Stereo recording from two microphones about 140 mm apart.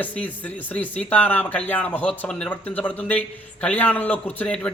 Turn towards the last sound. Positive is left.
turn(degrees=10)  # may be behind; listen again after turning